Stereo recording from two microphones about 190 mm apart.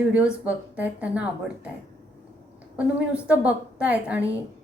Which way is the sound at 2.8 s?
5° right (ahead or behind).